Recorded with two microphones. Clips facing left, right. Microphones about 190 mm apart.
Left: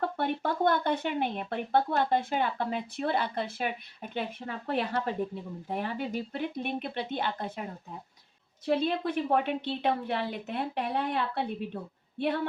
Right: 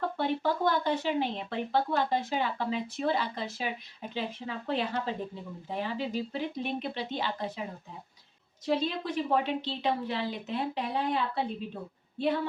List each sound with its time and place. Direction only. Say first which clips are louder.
0.2 s speech: right 1 dB; 60° left (ahead or behind)
8.6 s speech: left 2 dB; 60° left (ahead or behind)